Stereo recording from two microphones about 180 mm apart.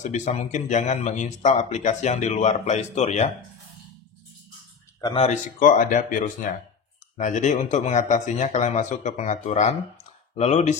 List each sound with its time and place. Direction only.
0.0 s speech: 40° left (ahead or behind)
5.1 s speech: 40° left (ahead or behind)